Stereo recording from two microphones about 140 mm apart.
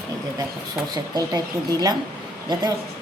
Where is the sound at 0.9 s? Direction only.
30° right (ahead or behind).